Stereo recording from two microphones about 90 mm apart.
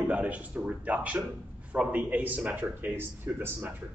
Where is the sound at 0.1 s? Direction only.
15° right (ahead or behind).